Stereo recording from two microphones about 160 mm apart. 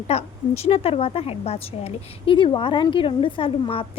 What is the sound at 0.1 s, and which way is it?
A woman's voice, 40° left (ahead or behind).